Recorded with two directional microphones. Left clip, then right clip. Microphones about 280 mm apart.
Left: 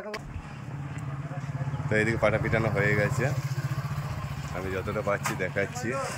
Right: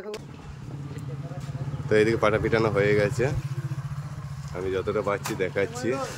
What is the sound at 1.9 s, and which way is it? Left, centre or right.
Speech, centre.